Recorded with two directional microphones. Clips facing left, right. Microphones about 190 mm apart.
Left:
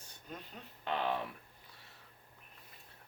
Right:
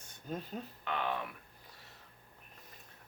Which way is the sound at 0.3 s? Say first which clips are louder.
Right 8 dB; 40° right (ahead or behind).